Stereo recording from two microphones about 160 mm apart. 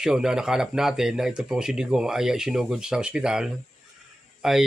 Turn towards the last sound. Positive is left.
turn(degrees=-5)  # may be behind; listen again after turning